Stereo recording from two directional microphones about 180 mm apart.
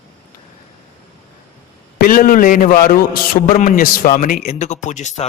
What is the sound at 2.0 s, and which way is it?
A man's voice, 55° left (ahead or behind).